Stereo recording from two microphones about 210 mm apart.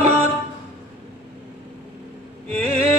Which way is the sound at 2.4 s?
30° right (ahead or behind).